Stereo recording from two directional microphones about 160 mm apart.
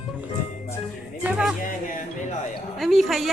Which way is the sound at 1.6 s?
55° left (ahead or behind).